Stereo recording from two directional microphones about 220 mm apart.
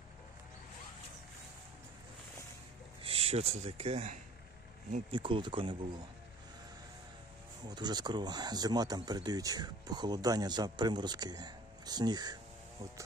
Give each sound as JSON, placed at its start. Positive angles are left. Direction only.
{"t": 3.0, "sound": "speech", "side_deg": -25}
{"t": 7.6, "sound": "speech", "side_deg": -20}